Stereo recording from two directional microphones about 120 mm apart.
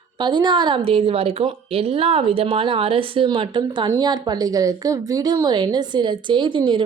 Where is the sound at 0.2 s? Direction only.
40° right (ahead or behind).